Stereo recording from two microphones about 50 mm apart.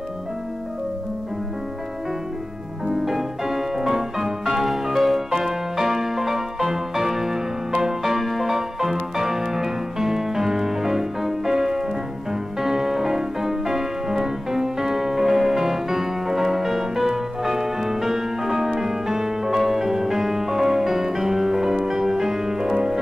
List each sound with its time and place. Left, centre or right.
2.9 s music: centre